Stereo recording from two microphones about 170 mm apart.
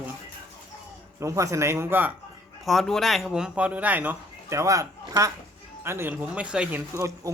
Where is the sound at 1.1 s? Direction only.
20° right (ahead or behind).